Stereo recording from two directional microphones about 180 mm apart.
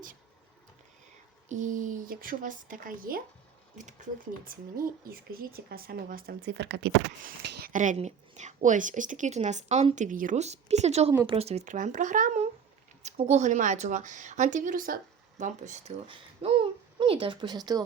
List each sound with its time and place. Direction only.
1.5 s a woman's voice: 45° right (ahead or behind); by 6.9 s 75° right (ahead or behind)
7.2 s a woman's voice: 55° right (ahead or behind); by 17.6 s 25° right (ahead or behind)